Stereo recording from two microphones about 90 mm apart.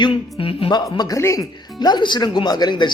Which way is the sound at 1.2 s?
35° left (ahead or behind).